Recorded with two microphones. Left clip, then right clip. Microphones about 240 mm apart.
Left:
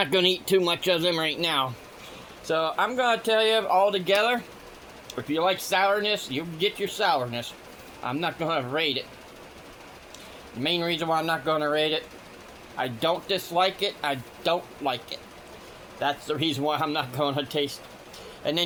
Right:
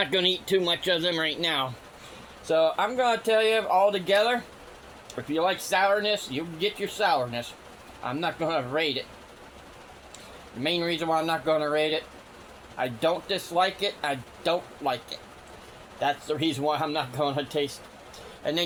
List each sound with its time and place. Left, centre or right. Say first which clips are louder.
0.0 s a man's voice: left 2 dB; left
10.6 s a man's voice: left 1 dB; left